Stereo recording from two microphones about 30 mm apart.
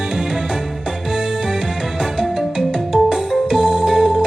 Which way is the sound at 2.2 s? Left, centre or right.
Centre.